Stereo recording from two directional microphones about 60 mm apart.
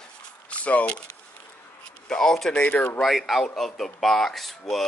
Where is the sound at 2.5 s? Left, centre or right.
Left.